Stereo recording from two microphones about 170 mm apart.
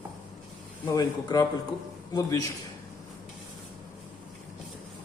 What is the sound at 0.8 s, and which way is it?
A man's voice, 25° left (ahead or behind).